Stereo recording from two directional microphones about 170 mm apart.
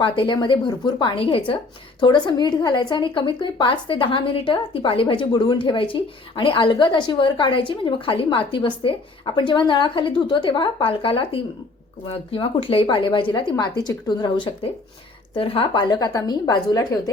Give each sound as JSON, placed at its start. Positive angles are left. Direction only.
{"t": 0.0, "sound": "speech", "side_deg": 30}